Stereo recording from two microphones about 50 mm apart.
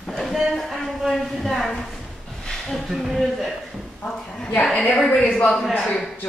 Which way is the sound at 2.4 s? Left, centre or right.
Centre.